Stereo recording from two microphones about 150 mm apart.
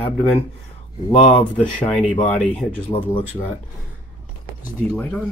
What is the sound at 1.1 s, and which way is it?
Speech, 35° left (ahead or behind).